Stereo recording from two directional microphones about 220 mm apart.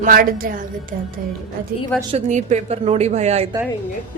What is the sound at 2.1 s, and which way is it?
Speech, 30° right (ahead or behind).